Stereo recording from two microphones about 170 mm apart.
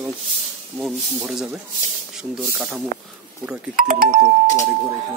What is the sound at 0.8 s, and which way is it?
Speech, 15° right (ahead or behind).